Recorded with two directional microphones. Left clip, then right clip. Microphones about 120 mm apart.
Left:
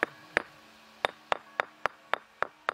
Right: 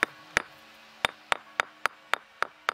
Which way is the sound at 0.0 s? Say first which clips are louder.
Right 2 dB; 20° right (ahead or behind).